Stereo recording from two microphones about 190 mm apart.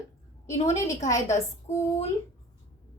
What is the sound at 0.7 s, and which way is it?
A woman's voice, 15° left (ahead or behind).